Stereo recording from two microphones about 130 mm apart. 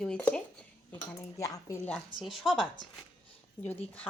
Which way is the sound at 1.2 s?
25° left (ahead or behind).